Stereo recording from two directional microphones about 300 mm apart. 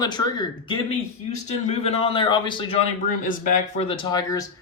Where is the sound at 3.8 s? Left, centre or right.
Centre.